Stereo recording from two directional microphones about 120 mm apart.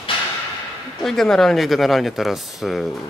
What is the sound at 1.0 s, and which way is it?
Speech, 5° left (ahead or behind).